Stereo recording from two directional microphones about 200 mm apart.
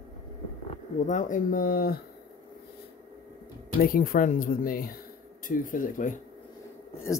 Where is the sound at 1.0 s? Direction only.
40° left (ahead or behind).